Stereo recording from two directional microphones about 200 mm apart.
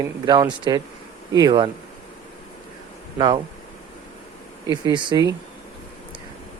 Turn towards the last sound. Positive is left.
turn(degrees=-20)  # may be behind; listen again after turning